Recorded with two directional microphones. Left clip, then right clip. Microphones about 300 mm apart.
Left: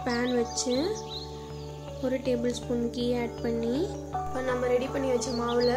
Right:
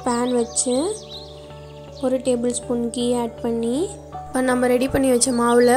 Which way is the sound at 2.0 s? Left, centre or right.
Centre.